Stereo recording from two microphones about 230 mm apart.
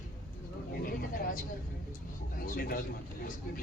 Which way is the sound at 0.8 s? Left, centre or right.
Left.